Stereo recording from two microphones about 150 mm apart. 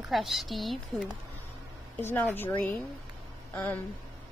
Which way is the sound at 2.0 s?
15° left (ahead or behind).